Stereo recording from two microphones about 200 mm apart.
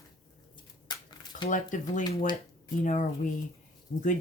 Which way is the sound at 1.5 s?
40° left (ahead or behind).